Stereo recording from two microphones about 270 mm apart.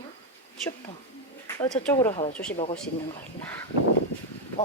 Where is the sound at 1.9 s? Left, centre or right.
Centre.